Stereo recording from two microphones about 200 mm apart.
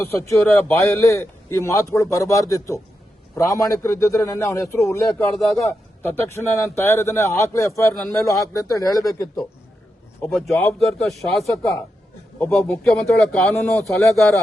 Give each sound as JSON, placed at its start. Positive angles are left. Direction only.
{"t": 0.0, "sound": "a man's voice", "side_deg": 15}
{"t": 5.4, "sound": "speech", "side_deg": 0}
{"t": 5.6, "sound": "a man's voice", "side_deg": 10}
{"t": 10.2, "sound": "speech", "side_deg": 5}